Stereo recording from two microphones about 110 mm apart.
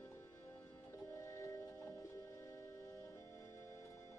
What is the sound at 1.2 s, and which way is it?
Music, 30° left (ahead or behind).